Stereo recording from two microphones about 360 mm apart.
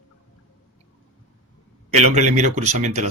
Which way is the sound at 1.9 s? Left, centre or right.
Centre.